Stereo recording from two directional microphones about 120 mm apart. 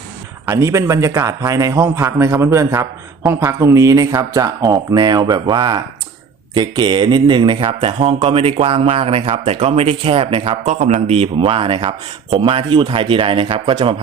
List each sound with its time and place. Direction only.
0.4 s a man's voice: 25° right (ahead or behind); by 10.6 s 50° right (ahead or behind)
10.7 s speech: 70° right (ahead or behind); by 13.9 s 45° right (ahead or behind)